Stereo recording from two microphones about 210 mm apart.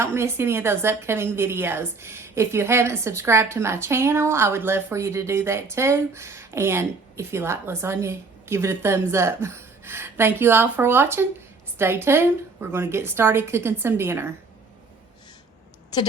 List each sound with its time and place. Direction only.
0.0 s a woman's voice: 10° right (ahead or behind)
15.9 s a woman's voice: 20° left (ahead or behind)